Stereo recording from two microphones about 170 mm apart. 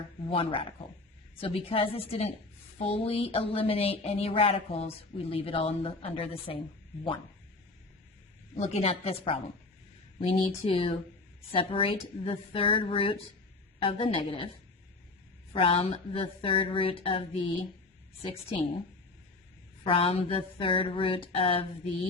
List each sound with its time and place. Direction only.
0.3 s speech: 30° left (ahead or behind)
8.5 s speech: 40° left (ahead or behind)
15.5 s a woman's voice: 35° left (ahead or behind)
19.8 s speech: 35° left (ahead or behind)